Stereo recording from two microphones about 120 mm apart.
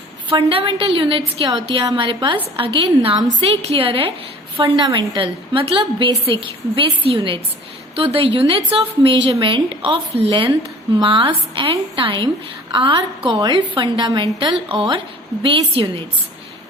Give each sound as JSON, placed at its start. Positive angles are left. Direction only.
{"t": 0.3, "sound": "a woman's voice", "side_deg": -50}